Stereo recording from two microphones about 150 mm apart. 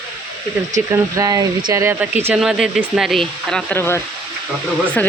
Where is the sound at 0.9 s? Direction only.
20° right (ahead or behind).